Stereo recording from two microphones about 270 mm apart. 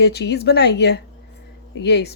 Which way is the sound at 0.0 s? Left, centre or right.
Left.